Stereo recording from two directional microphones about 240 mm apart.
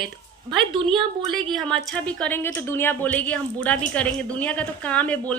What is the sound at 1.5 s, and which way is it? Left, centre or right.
Speech, centre.